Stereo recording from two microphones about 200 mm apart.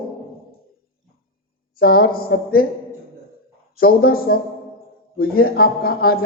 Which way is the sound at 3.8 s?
50° left (ahead or behind).